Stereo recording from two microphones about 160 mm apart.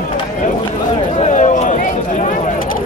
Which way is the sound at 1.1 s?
45° left (ahead or behind).